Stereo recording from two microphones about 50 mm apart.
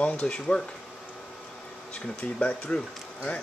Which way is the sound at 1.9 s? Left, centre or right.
Left.